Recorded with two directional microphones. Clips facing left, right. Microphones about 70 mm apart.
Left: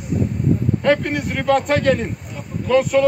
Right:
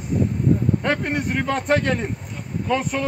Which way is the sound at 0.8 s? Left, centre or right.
Centre.